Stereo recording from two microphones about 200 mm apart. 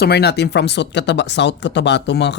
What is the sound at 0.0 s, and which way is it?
Speech, 55° left (ahead or behind).